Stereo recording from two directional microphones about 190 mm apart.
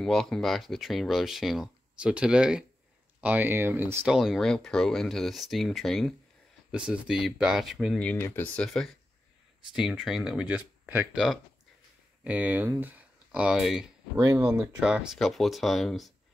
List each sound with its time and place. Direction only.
0.0 s speech: 5° left (ahead or behind)
14.2 s speech: 20° right (ahead or behind)
14.5 s speech: 5° right (ahead or behind)